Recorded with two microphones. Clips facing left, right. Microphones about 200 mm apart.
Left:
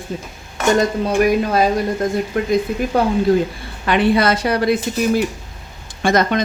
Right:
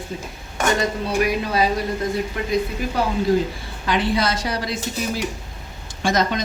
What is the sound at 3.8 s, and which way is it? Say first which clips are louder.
Speech: left 6 dB; 60° left (ahead or behind).